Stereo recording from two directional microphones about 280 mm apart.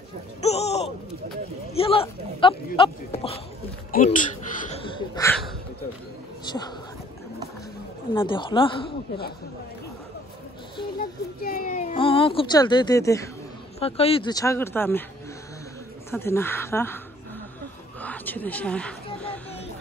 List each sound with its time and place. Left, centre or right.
0.4 s a sound: left
1.7 s speech: centre
3.9 s a sound: left
8.1 s speech: centre
11.0 s speech: left; by 15.0 s centre
16.1 s speech: centre
18.0 s a woman's voice: centre
19.1 s music: centre